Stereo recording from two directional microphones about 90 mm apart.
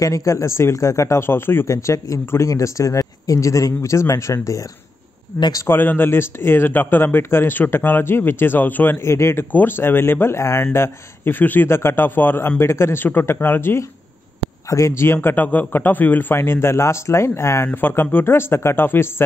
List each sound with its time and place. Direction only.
0.0 s speech: 35° left (ahead or behind)
1.7 s speech: 35° left (ahead or behind)
5.7 s speech: 20° left (ahead or behind)
9.0 s speech: 30° left (ahead or behind)
15.2 s speech: 20° left (ahead or behind)
17.7 s speech: 20° left (ahead or behind)